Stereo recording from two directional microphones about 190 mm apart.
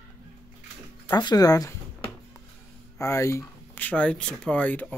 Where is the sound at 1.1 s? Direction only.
20° left (ahead or behind).